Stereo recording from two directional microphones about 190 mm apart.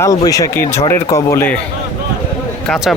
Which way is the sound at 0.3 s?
15° left (ahead or behind).